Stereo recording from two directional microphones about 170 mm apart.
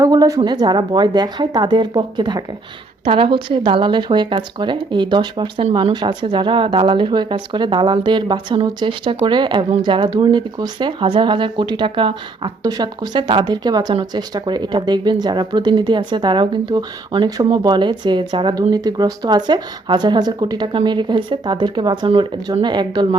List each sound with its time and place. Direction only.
0.0 s speech: 20° right (ahead or behind)